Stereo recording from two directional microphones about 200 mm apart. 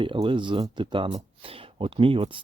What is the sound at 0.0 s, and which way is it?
Speech, 25° right (ahead or behind).